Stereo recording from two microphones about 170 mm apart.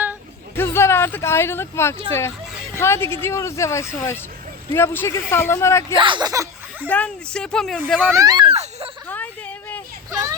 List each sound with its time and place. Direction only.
0.5 s speech: 15° left (ahead or behind)
6.0 s speech: 25° right (ahead or behind)
6.8 s speech: 10° left (ahead or behind)
8.0 s speech: 20° right (ahead or behind)
9.0 s a sound: 10° left (ahead or behind)
10.1 s a sound: 20° right (ahead or behind)